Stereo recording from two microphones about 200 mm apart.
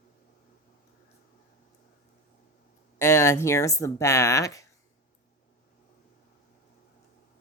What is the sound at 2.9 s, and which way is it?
Speech, 15° left (ahead or behind).